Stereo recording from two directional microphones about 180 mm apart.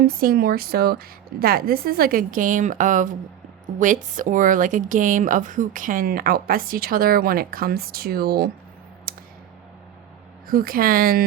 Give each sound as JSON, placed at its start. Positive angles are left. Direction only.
{"t": 0.0, "sound": "a woman's voice", "side_deg": -55}
{"t": 9.1, "sound": "a sound", "side_deg": -55}
{"t": 10.5, "sound": "speech", "side_deg": -55}